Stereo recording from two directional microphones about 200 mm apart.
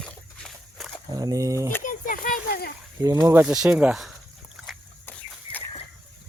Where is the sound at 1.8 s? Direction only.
45° left (ahead or behind).